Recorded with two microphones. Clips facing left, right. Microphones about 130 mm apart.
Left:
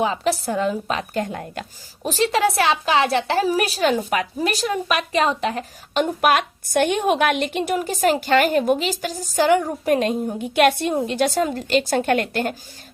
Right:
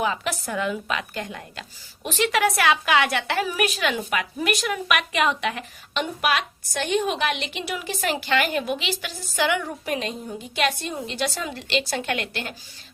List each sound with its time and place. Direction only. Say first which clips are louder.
0.0 s a woman's voice: left 5 dB; 30° left (ahead or behind); by 1.6 s 50° left (ahead or behind)
2.0 s a woman's voice: left 3 dB; 35° left (ahead or behind)